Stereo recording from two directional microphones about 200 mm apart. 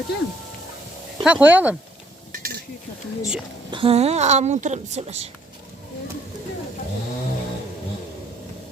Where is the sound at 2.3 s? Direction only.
50° right (ahead or behind).